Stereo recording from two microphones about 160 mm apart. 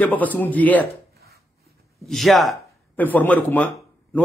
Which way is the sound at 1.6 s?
Centre (ahead or behind).